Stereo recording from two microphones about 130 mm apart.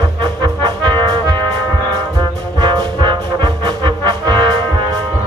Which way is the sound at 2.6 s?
35° right (ahead or behind).